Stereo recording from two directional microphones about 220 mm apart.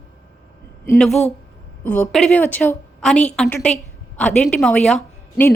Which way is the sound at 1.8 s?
5° left (ahead or behind).